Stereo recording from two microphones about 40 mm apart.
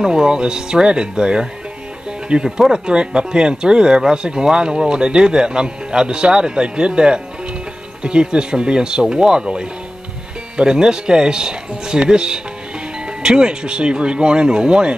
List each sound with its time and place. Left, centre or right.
0.0 s speech: centre